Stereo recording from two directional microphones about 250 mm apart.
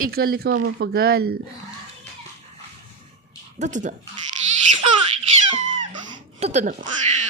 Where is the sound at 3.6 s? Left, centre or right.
Right.